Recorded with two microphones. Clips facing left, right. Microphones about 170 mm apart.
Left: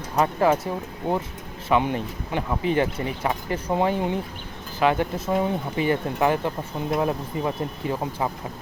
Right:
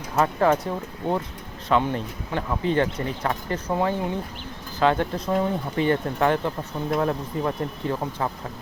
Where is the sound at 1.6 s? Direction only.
15° left (ahead or behind).